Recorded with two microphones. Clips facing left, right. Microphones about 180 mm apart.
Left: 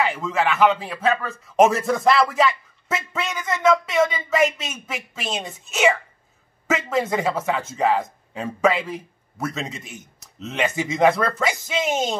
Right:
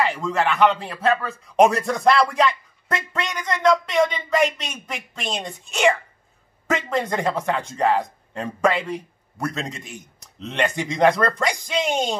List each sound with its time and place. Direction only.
0.0 s speech: centre (ahead or behind)